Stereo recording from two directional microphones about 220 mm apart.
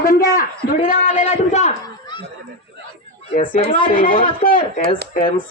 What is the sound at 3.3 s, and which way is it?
Speech, 35° left (ahead or behind).